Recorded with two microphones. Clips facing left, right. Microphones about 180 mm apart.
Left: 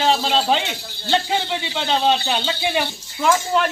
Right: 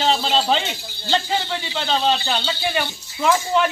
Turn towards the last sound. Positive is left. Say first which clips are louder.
# even
turn(degrees=0)  # may be behind; listen again after turning